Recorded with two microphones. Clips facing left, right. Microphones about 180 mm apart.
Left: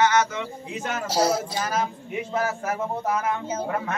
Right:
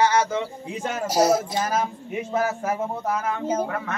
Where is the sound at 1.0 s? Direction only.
20° right (ahead or behind).